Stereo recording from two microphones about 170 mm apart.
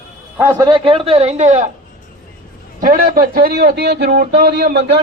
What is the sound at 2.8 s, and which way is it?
Speech, 55° right (ahead or behind).